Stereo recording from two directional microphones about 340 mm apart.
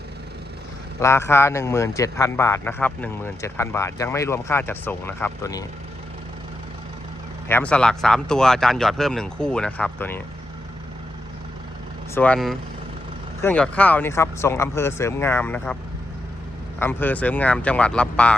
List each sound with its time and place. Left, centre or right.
0.9 s a man's voice: centre
7.4 s speech: centre
12.1 s a man's voice: centre
16.8 s speech: centre